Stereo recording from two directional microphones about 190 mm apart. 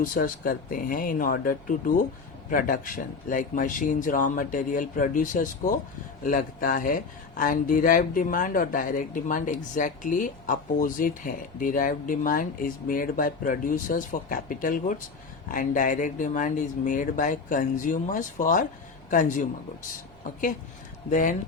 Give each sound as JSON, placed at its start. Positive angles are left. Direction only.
{"t": 0.0, "sound": "speech", "side_deg": 45}
{"t": 21.1, "sound": "speech", "side_deg": 40}